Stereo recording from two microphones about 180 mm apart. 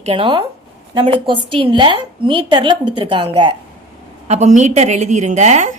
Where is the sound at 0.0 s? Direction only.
30° right (ahead or behind).